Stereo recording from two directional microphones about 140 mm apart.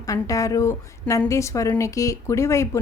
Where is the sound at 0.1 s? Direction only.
25° left (ahead or behind).